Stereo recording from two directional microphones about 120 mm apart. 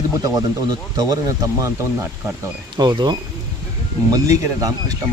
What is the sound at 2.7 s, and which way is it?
Speech, 35° right (ahead or behind).